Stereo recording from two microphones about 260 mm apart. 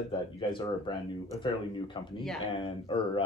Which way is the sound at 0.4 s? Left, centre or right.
Centre.